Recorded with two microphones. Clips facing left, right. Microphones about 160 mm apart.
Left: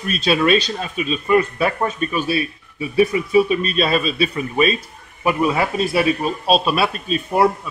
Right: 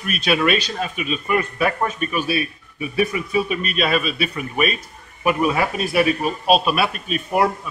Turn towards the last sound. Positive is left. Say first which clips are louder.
# left 3 dB
turn(degrees=30)  # may be behind; listen again after turning